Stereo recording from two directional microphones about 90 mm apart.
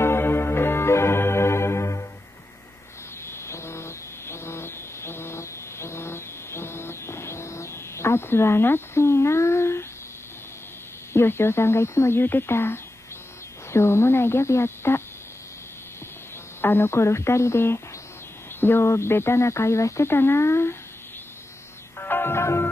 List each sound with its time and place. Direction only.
0.0 s organ: 25° left (ahead or behind)
3.3 s a sound: 30° left (ahead or behind)
11.1 s speech: 25° left (ahead or behind)
16.6 s speech: 25° left (ahead or behind)
21.9 s music: 25° left (ahead or behind)